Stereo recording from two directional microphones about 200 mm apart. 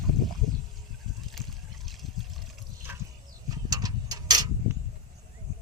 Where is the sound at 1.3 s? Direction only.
Centre (ahead or behind).